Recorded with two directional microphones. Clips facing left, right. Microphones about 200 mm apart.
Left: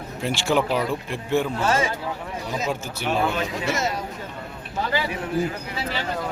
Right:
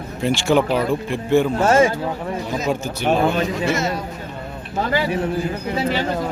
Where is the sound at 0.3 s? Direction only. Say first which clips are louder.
Right 5 dB; 5° left (ahead or behind).